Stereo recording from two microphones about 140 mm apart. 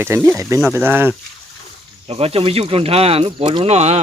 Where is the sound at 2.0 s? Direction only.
45° right (ahead or behind).